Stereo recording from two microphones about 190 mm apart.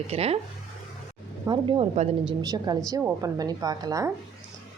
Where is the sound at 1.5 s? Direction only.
25° right (ahead or behind).